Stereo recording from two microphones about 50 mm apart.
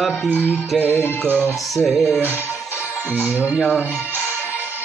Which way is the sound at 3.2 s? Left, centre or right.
Right.